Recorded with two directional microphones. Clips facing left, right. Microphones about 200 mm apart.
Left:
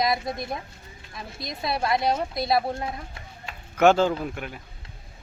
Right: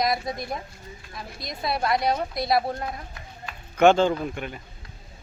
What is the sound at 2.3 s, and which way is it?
Speech, centre (ahead or behind).